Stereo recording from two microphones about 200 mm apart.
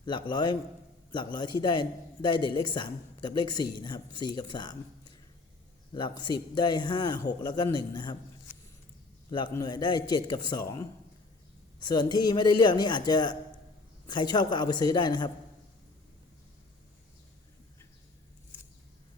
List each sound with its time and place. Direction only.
0.0 s a man's voice: 20° left (ahead or behind)
9.3 s a man's voice: 20° left (ahead or behind)